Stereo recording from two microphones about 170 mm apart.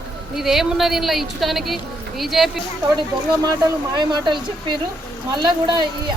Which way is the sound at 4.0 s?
25° right (ahead or behind).